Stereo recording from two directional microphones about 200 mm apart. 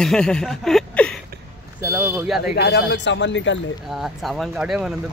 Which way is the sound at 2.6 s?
55° left (ahead or behind).